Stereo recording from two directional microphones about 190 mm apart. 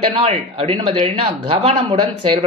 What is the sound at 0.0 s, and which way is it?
Speech, 30° right (ahead or behind).